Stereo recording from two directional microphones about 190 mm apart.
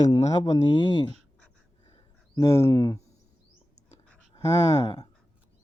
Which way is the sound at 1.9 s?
20° left (ahead or behind).